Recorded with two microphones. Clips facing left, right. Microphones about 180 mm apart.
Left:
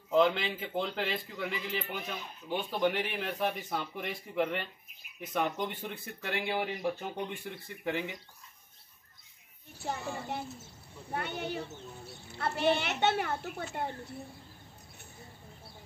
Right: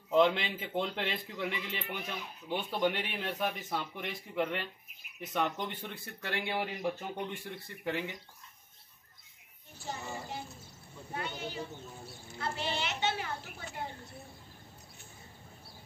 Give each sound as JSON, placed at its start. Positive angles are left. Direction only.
{"t": 0.1, "sound": "speech", "side_deg": 0}
{"t": 9.8, "sound": "a woman's voice", "side_deg": 60}